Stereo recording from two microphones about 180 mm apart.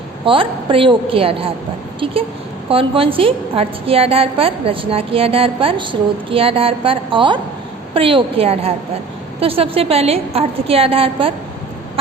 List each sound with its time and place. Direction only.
0.3 s a woman's voice: 30° right (ahead or behind)
2.6 s a woman's voice: 30° right (ahead or behind)